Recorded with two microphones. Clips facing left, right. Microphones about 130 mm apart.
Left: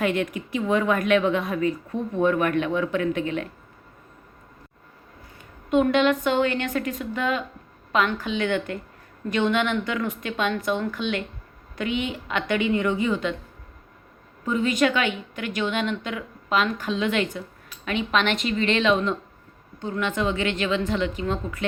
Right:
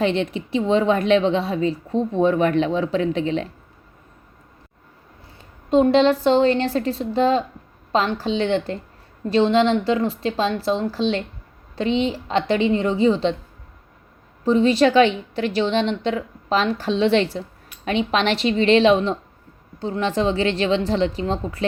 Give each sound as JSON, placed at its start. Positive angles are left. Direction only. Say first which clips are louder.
{"t": 0.0, "sound": "a woman's voice", "louder": "right 3 dB", "side_deg": -30}
{"t": 5.7, "sound": "a woman's voice", "louder": "right 4 dB", "side_deg": -30}
{"t": 14.4, "sound": "a woman's voice", "louder": "right 6 dB", "side_deg": -30}